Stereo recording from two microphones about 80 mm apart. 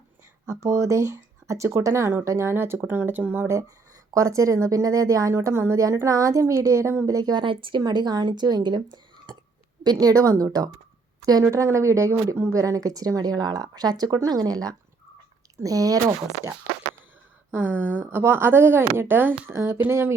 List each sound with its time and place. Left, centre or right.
0.4 s speech: right
4.1 s speech: right
7.3 s speech: right
7.8 s speech: right
9.8 s speech: right
11.5 s speech: right
17.5 s speech: right